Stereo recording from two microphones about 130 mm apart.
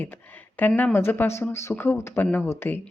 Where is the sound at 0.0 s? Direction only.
15° left (ahead or behind).